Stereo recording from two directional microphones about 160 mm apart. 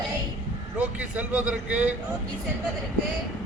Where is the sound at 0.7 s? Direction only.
10° right (ahead or behind).